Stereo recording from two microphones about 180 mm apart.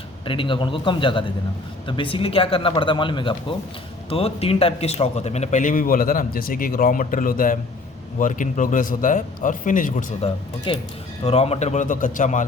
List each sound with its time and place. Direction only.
0.3 s a man's voice: 30° left (ahead or behind); by 12.5 s 45° left (ahead or behind)